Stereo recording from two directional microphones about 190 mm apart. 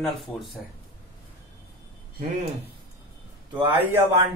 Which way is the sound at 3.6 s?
10° right (ahead or behind).